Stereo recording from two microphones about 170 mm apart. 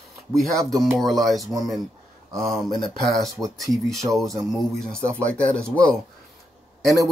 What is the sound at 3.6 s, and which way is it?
Speech, centre (ahead or behind).